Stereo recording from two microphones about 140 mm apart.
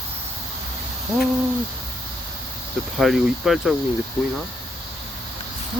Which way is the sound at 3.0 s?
5° right (ahead or behind).